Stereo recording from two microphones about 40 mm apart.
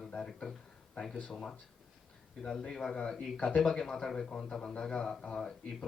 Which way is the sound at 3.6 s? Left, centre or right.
Centre.